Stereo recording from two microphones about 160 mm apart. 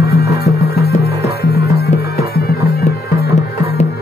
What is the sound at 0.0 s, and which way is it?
Music, 90° left.